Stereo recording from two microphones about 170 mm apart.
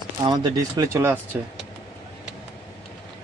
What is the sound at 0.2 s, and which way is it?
Speech, 25° right (ahead or behind).